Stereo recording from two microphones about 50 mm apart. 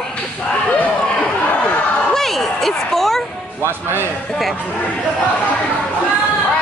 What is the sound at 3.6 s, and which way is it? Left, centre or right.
Speech, right.